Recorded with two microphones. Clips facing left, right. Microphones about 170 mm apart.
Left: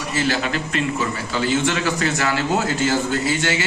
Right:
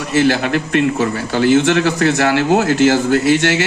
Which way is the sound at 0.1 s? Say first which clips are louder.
Right 8 dB; 65° right (ahead or behind).